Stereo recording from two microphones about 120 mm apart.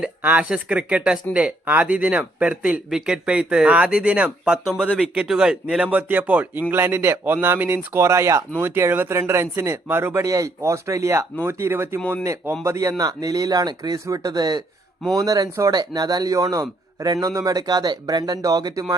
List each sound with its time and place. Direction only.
0.2 s speech: 10° right (ahead or behind)
11.9 s speech: 10° left (ahead or behind)
12.2 s a man's voice: 25° right (ahead or behind)